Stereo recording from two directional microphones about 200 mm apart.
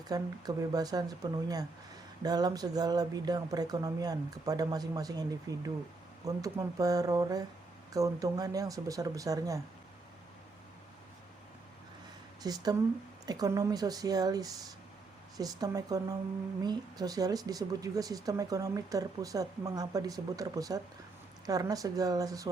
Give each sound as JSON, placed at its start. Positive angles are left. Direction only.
{"t": 0.1, "sound": "speech", "side_deg": -20}
{"t": 12.4, "sound": "speech", "side_deg": -20}